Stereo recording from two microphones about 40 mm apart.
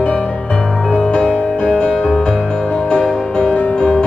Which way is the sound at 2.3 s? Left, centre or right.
Centre.